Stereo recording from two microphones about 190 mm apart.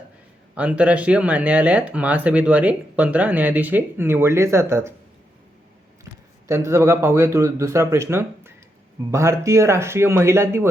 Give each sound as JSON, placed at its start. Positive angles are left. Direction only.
{"t": 0.5, "sound": "speech", "side_deg": -5}
{"t": 6.5, "sound": "speech", "side_deg": -15}